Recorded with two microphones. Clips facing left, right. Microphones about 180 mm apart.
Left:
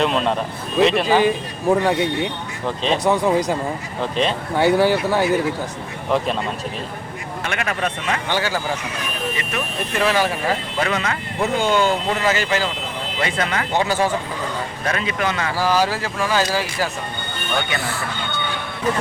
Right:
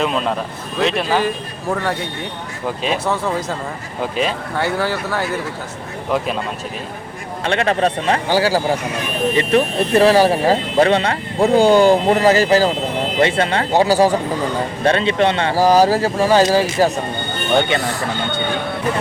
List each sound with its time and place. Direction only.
0.0 s a man's voice: centre (ahead or behind)
1.0 s speech: 10° left (ahead or behind)
2.6 s speech: 10° right (ahead or behind)
3.0 s speech: 15° left (ahead or behind)
4.2 s speech: 5° right (ahead or behind)
4.5 s speech: 15° left (ahead or behind)
6.1 s a man's voice: centre (ahead or behind)
7.4 s speech: 30° right (ahead or behind)